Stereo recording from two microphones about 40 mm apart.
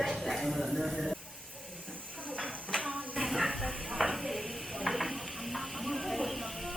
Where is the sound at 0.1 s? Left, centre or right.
Centre.